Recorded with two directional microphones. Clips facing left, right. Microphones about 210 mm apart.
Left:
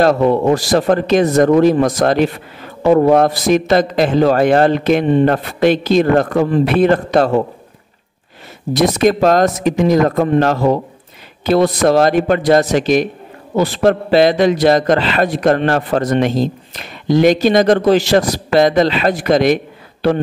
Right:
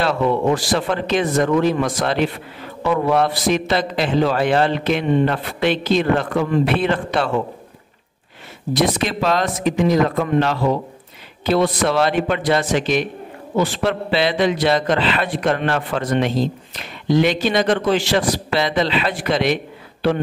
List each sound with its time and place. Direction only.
0.0 s a man's voice: 40° left (ahead or behind)
8.7 s a man's voice: 40° left (ahead or behind)